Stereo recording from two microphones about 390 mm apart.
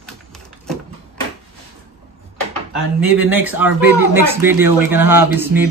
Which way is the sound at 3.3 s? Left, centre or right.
Centre.